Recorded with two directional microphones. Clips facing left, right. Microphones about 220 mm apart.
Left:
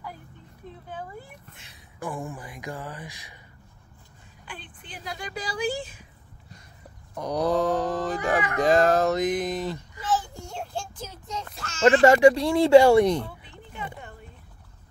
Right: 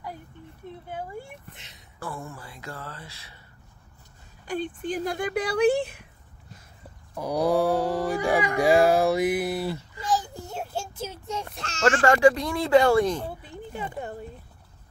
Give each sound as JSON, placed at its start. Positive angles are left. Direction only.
{"t": 1.5, "sound": "speech", "side_deg": -20}
{"t": 2.0, "sound": "speech", "side_deg": 15}
{"t": 4.5, "sound": "speech", "side_deg": -45}
{"t": 7.2, "sound": "speech", "side_deg": -10}
{"t": 11.8, "sound": "speech", "side_deg": 20}
{"t": 13.3, "sound": "a sound", "side_deg": -35}